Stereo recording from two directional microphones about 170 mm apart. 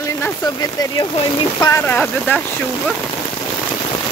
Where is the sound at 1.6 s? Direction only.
15° left (ahead or behind).